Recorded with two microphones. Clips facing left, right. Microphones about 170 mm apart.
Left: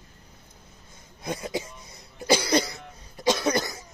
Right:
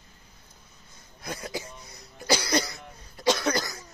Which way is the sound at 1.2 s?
20° left (ahead or behind).